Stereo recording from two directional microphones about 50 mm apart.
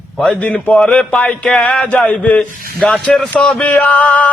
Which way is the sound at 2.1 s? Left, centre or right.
Left.